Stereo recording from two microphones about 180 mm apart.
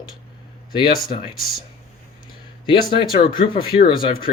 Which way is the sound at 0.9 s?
55° left (ahead or behind).